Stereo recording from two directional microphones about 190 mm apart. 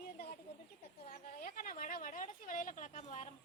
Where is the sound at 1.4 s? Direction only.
45° left (ahead or behind).